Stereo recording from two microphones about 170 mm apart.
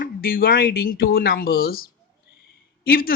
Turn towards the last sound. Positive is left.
turn(degrees=60)  # may be behind; listen again after turning